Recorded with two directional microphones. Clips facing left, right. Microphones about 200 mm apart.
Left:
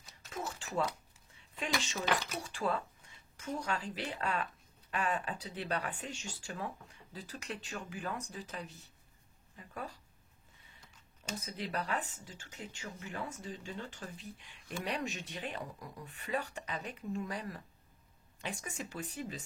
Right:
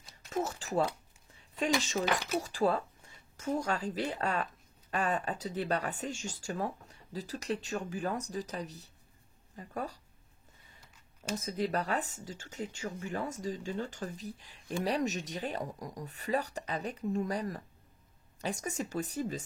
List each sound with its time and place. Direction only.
0.3 s speech: 40° right (ahead or behind)
2.4 s speech: 40° right (ahead or behind)
11.3 s speech: 45° right (ahead or behind)